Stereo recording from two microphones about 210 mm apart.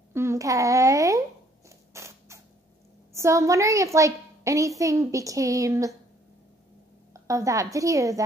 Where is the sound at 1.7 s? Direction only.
15° right (ahead or behind).